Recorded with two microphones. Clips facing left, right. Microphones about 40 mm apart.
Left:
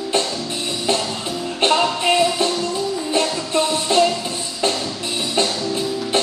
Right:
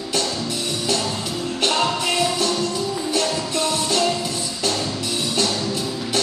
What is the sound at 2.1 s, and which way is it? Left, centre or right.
Music, left.